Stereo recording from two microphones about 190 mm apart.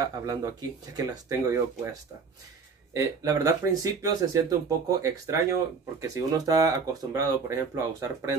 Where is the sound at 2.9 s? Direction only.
15° right (ahead or behind).